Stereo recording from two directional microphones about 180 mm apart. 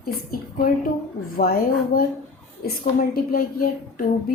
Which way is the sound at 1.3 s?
55° left (ahead or behind).